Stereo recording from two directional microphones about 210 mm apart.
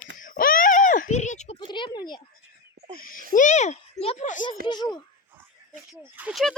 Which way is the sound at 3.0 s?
40° left (ahead or behind).